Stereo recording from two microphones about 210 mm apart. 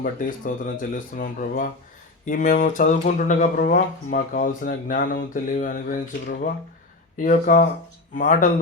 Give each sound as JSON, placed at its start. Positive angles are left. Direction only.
{"t": 0.0, "sound": "speech", "side_deg": 40}